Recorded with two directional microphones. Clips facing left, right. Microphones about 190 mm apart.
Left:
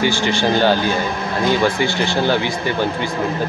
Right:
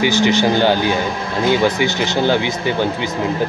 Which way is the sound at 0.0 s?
15° right (ahead or behind).